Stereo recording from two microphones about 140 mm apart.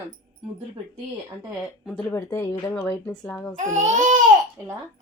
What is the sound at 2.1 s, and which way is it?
Speech, 20° left (ahead or behind).